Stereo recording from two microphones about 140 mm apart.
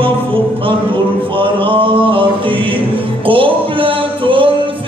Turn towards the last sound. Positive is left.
turn(degrees=-40)  # may be behind; listen again after turning